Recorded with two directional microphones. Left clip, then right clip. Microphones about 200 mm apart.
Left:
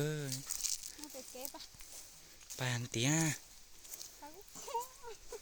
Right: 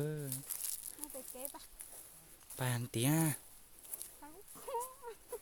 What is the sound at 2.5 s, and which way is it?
Speech, 15° right (ahead or behind).